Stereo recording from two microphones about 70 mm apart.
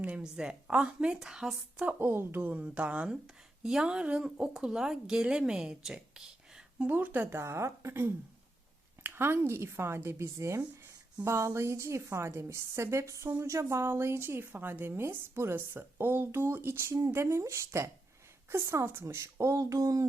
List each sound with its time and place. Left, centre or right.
0.0 s a woman's voice: centre
2.0 s a woman's voice: right; by 6.7 s centre
6.7 s speech: right
7.3 s a woman's voice: right